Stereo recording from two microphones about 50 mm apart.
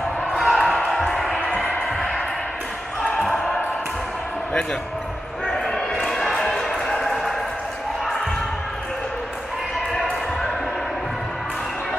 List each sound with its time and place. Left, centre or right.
0.4 s basketball bounce: centre
1.0 s a sound: centre
1.3 s music: left
5.5 s basketball bounce: centre